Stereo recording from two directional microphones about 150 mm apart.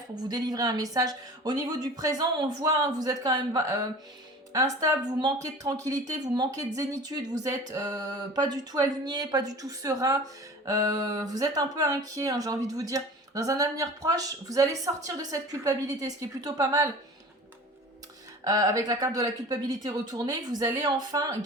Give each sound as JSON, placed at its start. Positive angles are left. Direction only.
{"t": 0.3, "sound": "speech", "side_deg": -25}
{"t": 18.4, "sound": "speech", "side_deg": -25}